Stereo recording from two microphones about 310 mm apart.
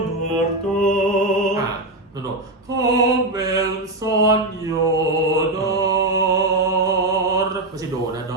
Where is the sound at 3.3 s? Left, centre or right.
Centre.